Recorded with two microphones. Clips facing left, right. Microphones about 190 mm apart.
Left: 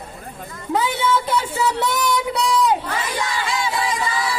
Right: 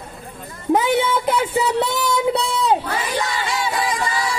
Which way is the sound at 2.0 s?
30° right (ahead or behind).